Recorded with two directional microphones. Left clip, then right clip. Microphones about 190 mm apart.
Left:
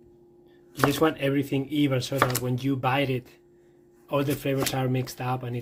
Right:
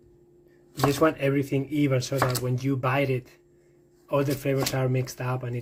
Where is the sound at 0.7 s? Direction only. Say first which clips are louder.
Even; centre (ahead or behind).